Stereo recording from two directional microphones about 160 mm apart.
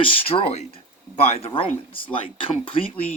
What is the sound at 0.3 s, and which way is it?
Speech, 40° left (ahead or behind).